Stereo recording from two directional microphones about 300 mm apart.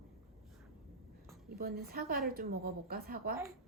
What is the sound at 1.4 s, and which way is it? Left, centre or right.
A woman's voice, right.